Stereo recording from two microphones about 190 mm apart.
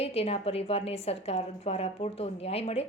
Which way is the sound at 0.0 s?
30° left (ahead or behind).